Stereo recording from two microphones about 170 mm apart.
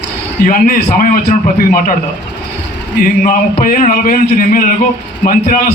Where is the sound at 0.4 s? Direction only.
55° left (ahead or behind).